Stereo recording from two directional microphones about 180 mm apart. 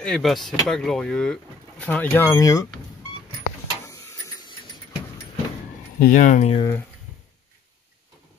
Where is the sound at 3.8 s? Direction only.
15° left (ahead or behind).